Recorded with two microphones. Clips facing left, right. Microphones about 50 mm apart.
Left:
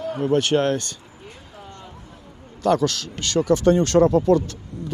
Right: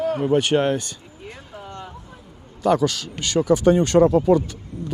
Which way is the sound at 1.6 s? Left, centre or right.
Right.